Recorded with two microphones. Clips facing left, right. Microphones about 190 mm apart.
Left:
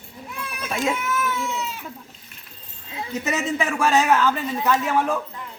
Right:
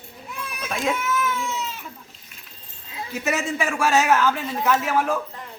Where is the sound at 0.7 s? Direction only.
Centre (ahead or behind).